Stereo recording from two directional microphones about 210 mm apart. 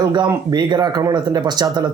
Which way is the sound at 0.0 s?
20° right (ahead or behind).